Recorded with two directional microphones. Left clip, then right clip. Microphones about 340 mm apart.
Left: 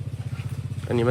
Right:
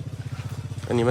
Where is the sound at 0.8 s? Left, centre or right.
Centre.